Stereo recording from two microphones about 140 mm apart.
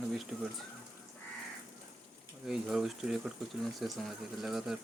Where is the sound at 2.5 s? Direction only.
5° right (ahead or behind).